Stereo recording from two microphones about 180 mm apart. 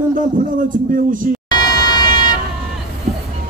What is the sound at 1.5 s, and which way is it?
Vehicle, 20° left (ahead or behind).